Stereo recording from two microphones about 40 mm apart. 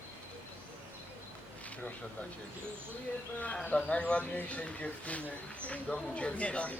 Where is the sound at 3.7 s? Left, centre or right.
Left.